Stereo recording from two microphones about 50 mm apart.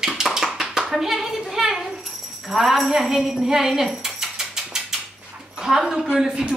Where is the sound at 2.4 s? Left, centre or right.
Centre.